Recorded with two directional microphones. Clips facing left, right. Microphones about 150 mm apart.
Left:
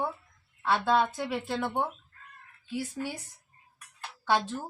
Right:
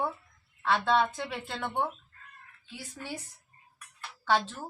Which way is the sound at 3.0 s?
15° left (ahead or behind).